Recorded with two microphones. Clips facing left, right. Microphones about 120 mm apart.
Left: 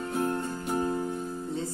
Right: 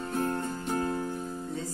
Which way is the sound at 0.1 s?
10° left (ahead or behind).